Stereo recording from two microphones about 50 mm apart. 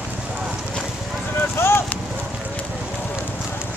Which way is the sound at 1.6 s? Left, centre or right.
Left.